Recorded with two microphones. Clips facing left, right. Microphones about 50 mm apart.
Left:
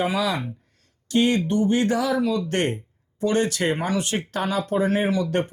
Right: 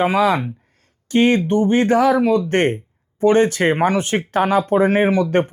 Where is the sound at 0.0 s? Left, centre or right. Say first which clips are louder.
Right 7 dB; right.